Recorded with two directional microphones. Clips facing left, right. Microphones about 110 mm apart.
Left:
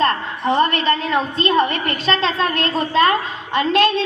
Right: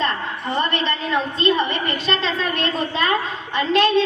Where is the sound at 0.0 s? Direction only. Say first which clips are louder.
Left 5 dB; 50° left (ahead or behind).